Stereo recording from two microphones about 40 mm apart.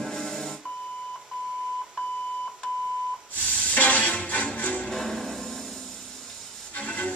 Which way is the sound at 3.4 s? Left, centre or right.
Left.